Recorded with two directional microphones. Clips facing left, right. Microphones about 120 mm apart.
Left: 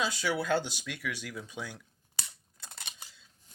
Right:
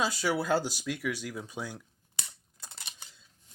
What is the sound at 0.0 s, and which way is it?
Speech, 40° right (ahead or behind).